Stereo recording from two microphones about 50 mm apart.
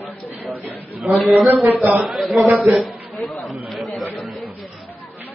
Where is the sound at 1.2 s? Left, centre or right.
Centre.